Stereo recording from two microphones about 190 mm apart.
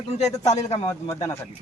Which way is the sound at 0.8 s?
20° left (ahead or behind).